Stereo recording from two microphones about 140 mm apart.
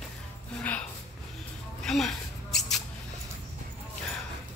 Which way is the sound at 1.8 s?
Centre (ahead or behind).